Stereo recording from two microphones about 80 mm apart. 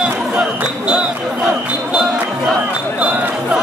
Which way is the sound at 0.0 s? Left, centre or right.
Centre.